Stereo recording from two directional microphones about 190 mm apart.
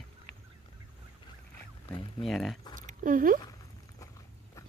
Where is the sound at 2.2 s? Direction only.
Centre (ahead or behind).